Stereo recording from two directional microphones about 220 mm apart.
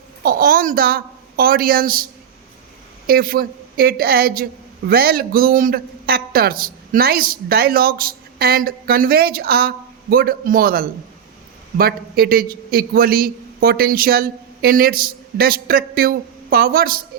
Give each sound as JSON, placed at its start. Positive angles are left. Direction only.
{"t": 0.2, "sound": "a woman's voice", "side_deg": -40}
{"t": 3.1, "sound": "speech", "side_deg": -40}